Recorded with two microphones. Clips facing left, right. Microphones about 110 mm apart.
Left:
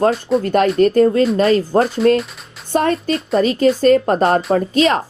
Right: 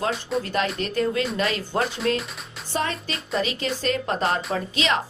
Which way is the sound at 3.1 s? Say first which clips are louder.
Left 10 dB; centre (ahead or behind).